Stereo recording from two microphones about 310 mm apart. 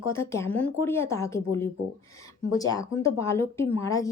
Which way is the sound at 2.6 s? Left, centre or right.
Centre.